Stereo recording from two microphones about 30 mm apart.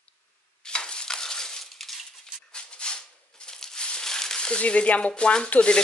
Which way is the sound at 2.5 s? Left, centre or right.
Left.